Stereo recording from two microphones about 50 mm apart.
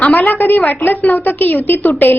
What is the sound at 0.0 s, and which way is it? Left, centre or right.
A woman's voice, left.